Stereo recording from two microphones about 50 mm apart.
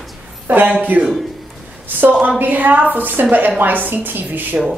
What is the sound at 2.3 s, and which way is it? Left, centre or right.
A woman's voice, right.